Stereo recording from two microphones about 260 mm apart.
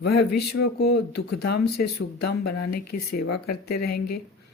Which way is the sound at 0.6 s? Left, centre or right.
Left.